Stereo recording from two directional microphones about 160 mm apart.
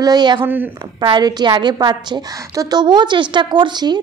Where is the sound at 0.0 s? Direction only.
25° right (ahead or behind).